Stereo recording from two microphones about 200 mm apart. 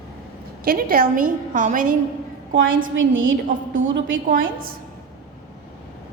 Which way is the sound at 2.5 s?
75° right (ahead or behind).